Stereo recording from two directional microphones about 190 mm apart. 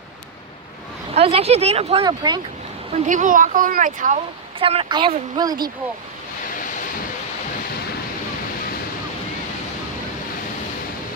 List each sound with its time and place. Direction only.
1.1 s speech: 30° right (ahead or behind)
2.9 s speech: 40° right (ahead or behind)
4.6 s speech: 30° right (ahead or behind)